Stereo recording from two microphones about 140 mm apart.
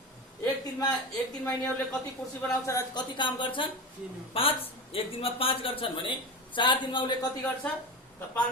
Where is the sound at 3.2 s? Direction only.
35° left (ahead or behind).